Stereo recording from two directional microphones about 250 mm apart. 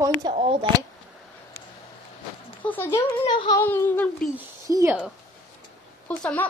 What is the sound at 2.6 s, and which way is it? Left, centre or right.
Speech, centre.